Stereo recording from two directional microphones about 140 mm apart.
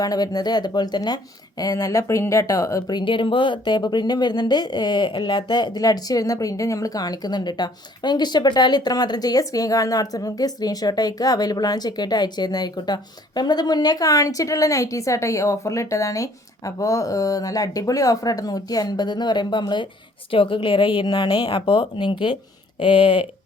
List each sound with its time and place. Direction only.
0.0 s a woman's voice: 25° left (ahead or behind)